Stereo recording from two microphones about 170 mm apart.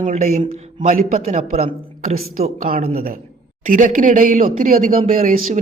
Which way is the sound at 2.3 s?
55° right (ahead or behind).